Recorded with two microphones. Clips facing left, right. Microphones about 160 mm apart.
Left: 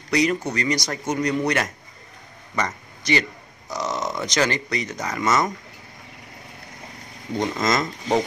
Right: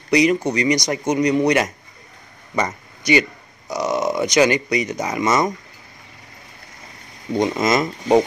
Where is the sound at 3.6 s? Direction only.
15° right (ahead or behind).